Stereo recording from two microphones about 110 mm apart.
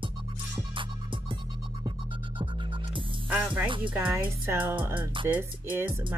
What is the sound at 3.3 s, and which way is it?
Speech, 10° right (ahead or behind).